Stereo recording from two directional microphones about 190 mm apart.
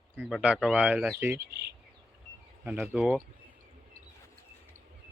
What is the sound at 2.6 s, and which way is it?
Speech, 10° right (ahead or behind).